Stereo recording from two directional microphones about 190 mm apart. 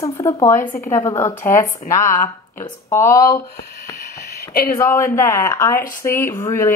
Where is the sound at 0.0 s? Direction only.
15° left (ahead or behind).